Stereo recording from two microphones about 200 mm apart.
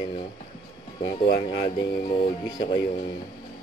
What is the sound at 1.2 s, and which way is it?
Speech, 50° left (ahead or behind).